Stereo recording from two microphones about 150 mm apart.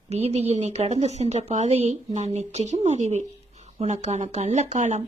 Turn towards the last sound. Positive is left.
turn(degrees=-50)  # may be behind; listen again after turning